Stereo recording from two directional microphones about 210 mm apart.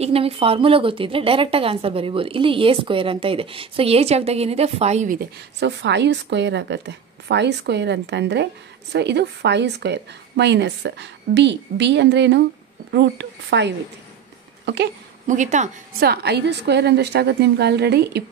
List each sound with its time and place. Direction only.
0.0 s a woman's voice: 25° right (ahead or behind)
5.6 s a woman's voice: 55° right (ahead or behind)
15.2 s a woman's voice: 35° right (ahead or behind)
16.1 s a woman's voice: 50° right (ahead or behind)